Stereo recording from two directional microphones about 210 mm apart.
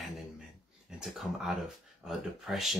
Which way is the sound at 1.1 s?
Centre (ahead or behind).